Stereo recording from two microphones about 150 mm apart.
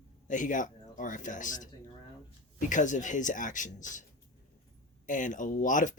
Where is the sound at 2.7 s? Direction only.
55° left (ahead or behind).